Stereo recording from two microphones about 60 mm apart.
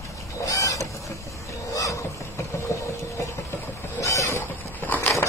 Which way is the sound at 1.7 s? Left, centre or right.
Left.